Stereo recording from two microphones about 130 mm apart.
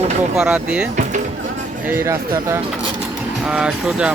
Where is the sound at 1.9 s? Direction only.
20° right (ahead or behind).